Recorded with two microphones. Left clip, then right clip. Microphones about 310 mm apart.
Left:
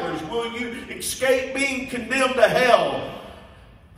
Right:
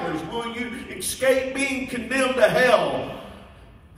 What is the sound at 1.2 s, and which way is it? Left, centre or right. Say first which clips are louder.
A man's voice: even; centre.